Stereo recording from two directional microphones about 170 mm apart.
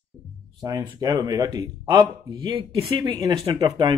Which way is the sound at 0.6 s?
20° right (ahead or behind).